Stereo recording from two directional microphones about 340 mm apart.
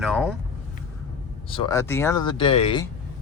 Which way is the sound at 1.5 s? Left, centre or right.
Centre.